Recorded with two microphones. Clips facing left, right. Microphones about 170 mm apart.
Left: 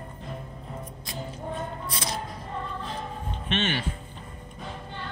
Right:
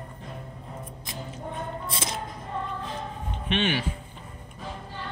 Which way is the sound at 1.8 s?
25° right (ahead or behind).